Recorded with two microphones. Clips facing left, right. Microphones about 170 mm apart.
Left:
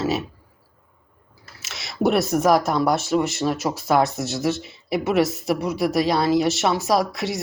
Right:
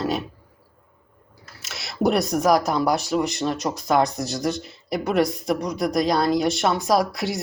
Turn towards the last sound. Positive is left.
turn(degrees=0)  # may be behind; listen again after turning